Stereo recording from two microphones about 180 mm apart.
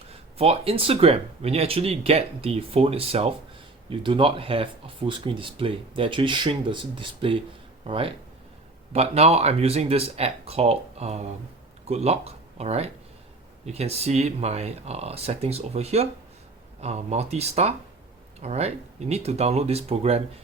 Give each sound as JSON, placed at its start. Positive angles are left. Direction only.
{"t": 0.3, "sound": "speech", "side_deg": -35}